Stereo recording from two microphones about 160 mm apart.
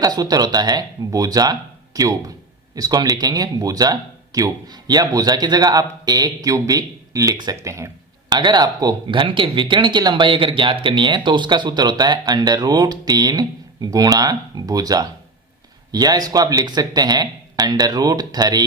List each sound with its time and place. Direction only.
0.0 s speech: 25° right (ahead or behind)